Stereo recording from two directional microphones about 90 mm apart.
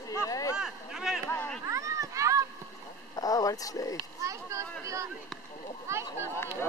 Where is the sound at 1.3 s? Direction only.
20° left (ahead or behind).